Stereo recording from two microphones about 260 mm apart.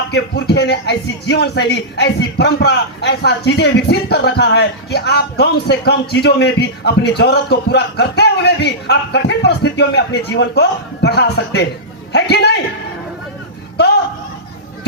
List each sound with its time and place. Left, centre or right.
0.1 s a man's voice: left